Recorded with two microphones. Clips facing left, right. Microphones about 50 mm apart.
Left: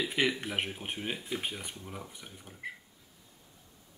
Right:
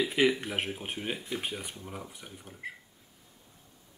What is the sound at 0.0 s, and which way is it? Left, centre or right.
Speech, centre.